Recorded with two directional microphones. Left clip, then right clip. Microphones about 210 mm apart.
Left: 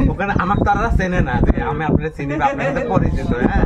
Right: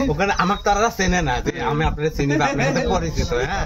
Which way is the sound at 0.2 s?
50° right (ahead or behind).